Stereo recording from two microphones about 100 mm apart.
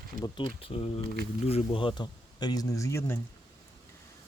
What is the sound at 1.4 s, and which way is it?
Speech, 80° left.